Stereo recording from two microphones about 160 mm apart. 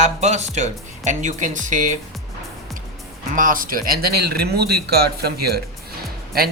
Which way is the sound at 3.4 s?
60° right (ahead or behind).